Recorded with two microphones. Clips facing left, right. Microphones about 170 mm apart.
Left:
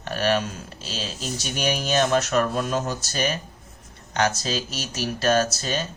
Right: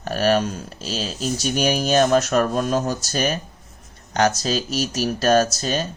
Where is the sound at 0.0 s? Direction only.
40° right (ahead or behind).